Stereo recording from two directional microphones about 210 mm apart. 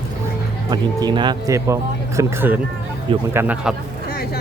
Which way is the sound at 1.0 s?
20° right (ahead or behind).